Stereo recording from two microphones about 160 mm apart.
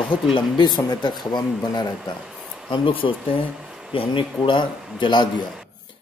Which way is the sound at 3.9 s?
35° left (ahead or behind).